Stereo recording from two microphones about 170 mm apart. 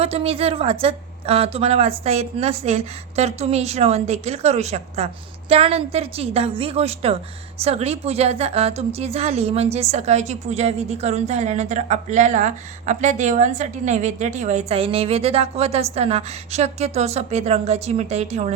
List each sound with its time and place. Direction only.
0.0 s a woman's voice: 35° right (ahead or behind)